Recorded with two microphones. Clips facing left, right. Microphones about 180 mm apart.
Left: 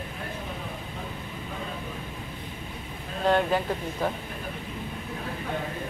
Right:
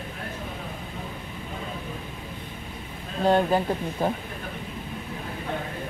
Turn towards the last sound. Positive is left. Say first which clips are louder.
# right 3 dB
turn(degrees=-30)  # may be behind; listen again after turning